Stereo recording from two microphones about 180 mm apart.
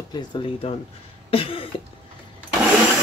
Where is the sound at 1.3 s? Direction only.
30° left (ahead or behind).